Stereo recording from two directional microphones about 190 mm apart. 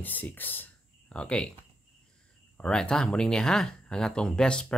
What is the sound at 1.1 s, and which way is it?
Speech, 5° left (ahead or behind).